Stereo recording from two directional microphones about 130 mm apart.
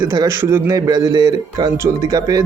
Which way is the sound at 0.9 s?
30° right (ahead or behind).